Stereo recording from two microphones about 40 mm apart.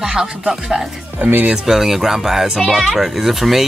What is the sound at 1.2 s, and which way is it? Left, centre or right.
Speech, right.